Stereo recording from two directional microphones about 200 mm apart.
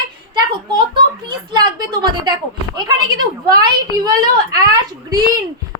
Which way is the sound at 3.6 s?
20° right (ahead or behind).